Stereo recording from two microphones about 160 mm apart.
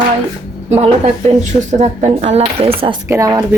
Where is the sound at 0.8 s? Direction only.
40° right (ahead or behind).